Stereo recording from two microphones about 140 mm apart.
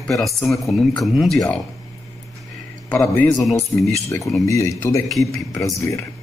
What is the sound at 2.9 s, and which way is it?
Speech, 15° left (ahead or behind).